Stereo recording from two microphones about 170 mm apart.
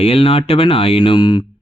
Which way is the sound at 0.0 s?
35° left (ahead or behind).